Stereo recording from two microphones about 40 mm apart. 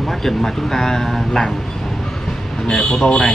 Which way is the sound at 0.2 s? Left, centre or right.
Centre.